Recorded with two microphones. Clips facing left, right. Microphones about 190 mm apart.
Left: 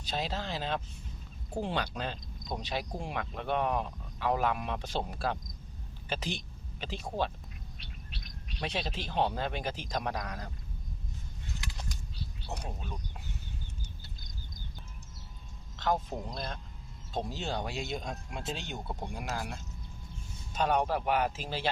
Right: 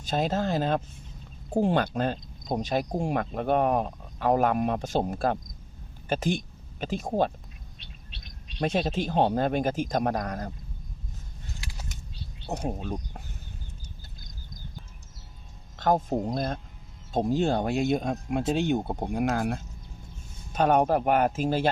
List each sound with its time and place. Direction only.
0.0 s speech: 50° right (ahead or behind)
8.1 s bird: 25° right (ahead or behind)
8.6 s speech: 50° right (ahead or behind)
11.9 s a sound: 25° right (ahead or behind)
15.7 s speech: 50° right (ahead or behind)